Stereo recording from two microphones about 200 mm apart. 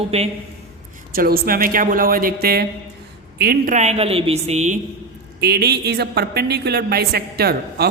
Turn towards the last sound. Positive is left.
turn(degrees=-50)  # may be behind; listen again after turning